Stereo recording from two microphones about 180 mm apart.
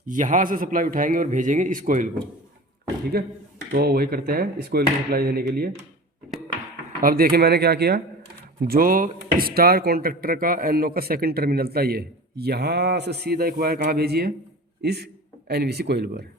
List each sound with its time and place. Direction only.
0.0 s a man's voice: 45° right (ahead or behind)
3.1 s speech: 60° right (ahead or behind)
7.0 s a man's voice: 55° right (ahead or behind)